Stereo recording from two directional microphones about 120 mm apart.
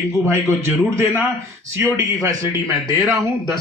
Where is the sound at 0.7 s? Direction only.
20° right (ahead or behind).